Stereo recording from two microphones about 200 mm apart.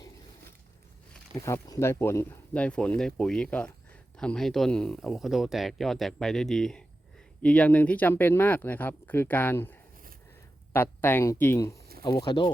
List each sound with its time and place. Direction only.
1.4 s speech: 15° left (ahead or behind)